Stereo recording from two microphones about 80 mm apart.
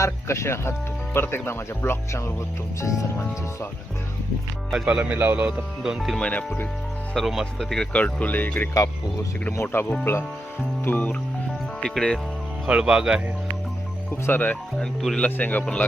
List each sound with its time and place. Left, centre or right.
0.0 s speech: left
4.7 s speech: centre
5.1 s speech: right
5.8 s speech: centre
6.1 s speech: centre
7.3 s speech: centre
7.9 s speech: centre
8.7 s speech: left
10.8 s speech: centre
11.8 s speech: centre
12.6 s speech: centre
14.1 s speech: left
15.4 s speech: left
15.6 s speech: centre